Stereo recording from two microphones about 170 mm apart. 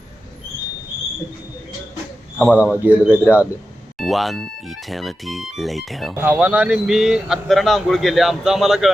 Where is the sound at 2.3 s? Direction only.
10° left (ahead or behind).